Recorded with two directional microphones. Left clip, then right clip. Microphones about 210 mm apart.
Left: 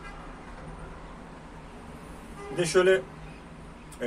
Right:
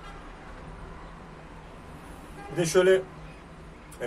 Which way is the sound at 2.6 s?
Centre (ahead or behind).